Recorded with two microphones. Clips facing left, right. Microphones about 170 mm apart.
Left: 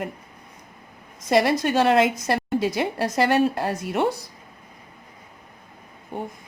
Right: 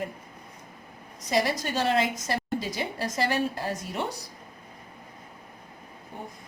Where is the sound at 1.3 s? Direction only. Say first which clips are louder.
Left 7 dB; 65° left (ahead or behind).